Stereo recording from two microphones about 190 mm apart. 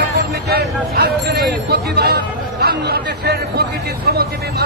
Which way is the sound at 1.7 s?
55° right (ahead or behind).